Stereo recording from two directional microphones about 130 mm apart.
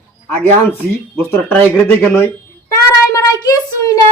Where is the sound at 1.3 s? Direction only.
10° left (ahead or behind).